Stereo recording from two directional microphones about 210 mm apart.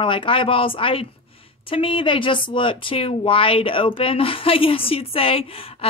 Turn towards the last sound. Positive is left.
turn(degrees=25)  # may be behind; listen again after turning